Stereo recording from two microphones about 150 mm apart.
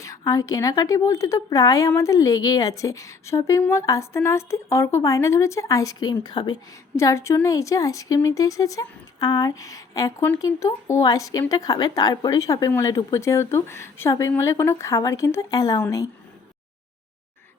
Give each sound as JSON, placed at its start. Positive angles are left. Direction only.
{"t": 0.0, "sound": "a woman's voice", "side_deg": 25}